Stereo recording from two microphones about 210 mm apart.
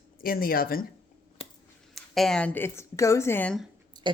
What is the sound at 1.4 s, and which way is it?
Scissors, 30° left (ahead or behind).